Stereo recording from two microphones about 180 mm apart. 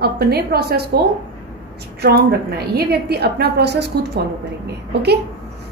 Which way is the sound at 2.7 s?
60° right (ahead or behind).